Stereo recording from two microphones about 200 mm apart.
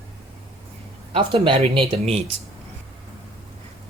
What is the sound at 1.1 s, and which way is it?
Speech, 25° right (ahead or behind).